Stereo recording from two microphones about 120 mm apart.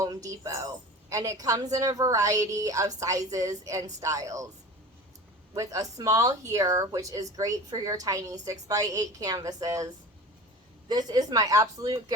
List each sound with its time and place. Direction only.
0.0 s speech: 30° right (ahead or behind)
5.5 s speech: 30° right (ahead or behind)